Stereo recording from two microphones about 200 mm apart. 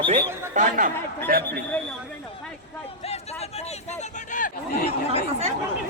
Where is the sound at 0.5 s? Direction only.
40° right (ahead or behind).